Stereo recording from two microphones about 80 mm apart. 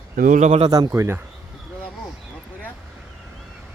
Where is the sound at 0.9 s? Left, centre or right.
Right.